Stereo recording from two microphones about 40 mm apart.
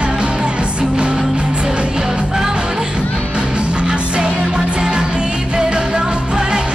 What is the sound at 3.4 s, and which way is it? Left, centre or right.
Music, right.